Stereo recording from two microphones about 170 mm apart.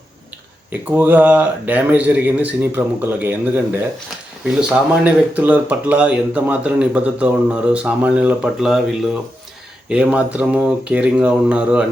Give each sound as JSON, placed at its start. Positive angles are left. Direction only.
{"t": 0.7, "sound": "speech", "side_deg": -10}
{"t": 4.7, "sound": "speech", "side_deg": -10}